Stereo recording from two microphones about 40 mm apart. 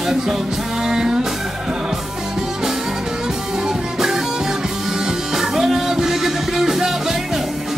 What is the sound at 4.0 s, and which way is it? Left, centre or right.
Music, centre.